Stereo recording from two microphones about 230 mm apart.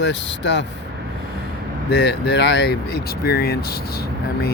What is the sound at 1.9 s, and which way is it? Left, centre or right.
Speech, left.